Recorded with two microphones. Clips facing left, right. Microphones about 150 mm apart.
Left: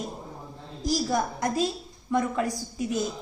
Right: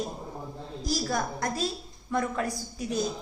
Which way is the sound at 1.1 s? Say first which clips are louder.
Left 3 dB; 20° left (ahead or behind).